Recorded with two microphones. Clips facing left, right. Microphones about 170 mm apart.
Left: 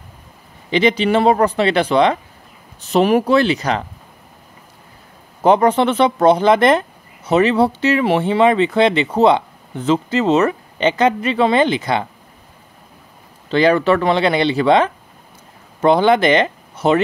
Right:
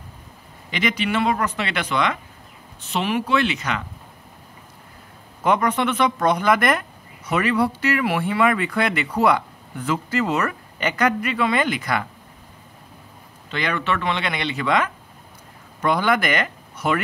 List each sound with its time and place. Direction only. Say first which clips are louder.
0.7 s speech: left 9 dB; 30° left (ahead or behind)
5.4 s speech: left 7 dB; 30° left (ahead or behind)
13.5 s speech: left 11 dB; 30° left (ahead or behind)